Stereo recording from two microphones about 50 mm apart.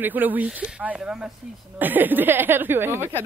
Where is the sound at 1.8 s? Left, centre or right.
Right.